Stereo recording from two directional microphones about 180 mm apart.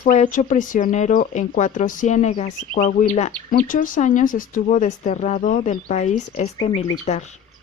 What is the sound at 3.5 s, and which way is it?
A woman's voice, 50° left (ahead or behind).